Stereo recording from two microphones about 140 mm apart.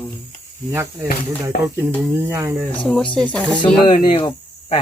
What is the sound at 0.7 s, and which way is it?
Speech, 20° right (ahead or behind).